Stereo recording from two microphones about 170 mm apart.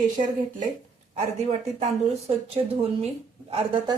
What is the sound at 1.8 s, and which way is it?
A woman's voice, 35° right (ahead or behind).